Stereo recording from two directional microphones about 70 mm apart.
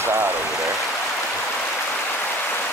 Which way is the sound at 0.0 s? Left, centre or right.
Right.